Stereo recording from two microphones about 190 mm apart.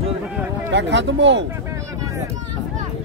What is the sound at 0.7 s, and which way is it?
Speech, 70° right (ahead or behind).